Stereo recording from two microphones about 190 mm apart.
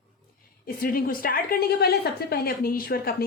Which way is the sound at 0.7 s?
50° left (ahead or behind).